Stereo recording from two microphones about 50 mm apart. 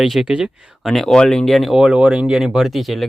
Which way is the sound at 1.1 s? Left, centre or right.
Centre.